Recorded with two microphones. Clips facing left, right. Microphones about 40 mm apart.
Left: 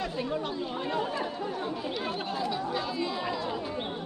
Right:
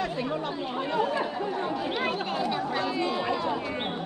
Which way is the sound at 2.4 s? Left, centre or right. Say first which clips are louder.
Right 2 dB; centre.